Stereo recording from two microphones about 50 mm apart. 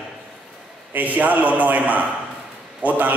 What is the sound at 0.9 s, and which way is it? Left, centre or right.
A man's voice, right.